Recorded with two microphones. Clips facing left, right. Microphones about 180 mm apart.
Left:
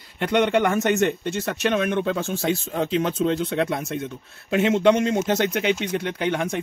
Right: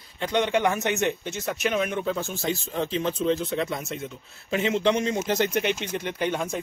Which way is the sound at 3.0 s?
70° left (ahead or behind).